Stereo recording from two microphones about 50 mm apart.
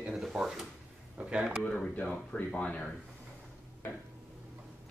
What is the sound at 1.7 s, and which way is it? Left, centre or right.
Speech, left.